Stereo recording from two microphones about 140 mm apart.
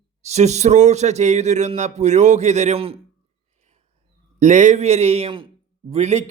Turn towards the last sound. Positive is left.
turn(degrees=-55)  # may be behind; listen again after turning